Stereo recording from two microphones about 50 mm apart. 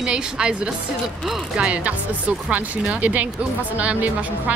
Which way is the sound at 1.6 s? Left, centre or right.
Right.